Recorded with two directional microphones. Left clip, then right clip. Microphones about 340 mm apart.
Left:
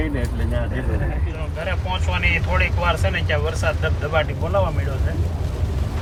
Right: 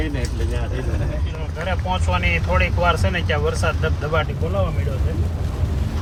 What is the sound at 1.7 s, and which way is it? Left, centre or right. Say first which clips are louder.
Speech: right 4 dB; centre.